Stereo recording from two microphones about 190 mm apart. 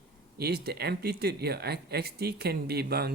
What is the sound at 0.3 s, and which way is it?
Speech, 55° right (ahead or behind).